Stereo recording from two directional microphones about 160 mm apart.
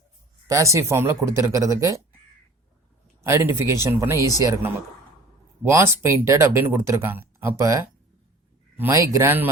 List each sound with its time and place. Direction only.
0.4 s speech: 20° right (ahead or behind)
3.2 s speech: 15° right (ahead or behind)